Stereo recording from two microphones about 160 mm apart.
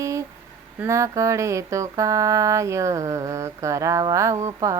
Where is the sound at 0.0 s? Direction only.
20° right (ahead or behind).